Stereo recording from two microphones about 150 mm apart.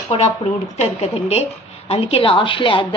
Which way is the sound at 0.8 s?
45° left (ahead or behind).